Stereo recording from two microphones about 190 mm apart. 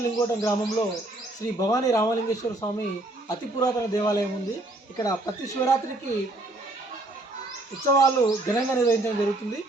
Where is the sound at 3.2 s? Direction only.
20° left (ahead or behind).